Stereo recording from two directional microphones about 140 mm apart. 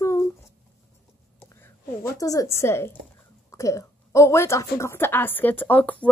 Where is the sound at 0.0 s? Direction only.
20° left (ahead or behind).